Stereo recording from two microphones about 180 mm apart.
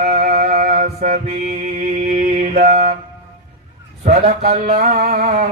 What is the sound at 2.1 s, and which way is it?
Mantra, 50° right (ahead or behind).